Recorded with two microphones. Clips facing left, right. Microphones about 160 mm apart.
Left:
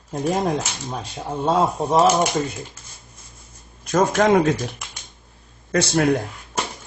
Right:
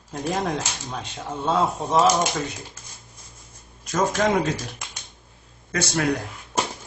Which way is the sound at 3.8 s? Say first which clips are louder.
Left 5 dB; 55° left (ahead or behind).